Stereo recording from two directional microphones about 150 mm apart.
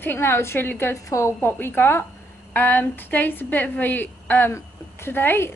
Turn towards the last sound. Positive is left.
turn(degrees=15)  # may be behind; listen again after turning